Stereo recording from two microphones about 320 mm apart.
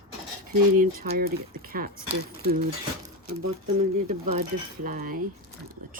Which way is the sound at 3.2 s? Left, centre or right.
Right.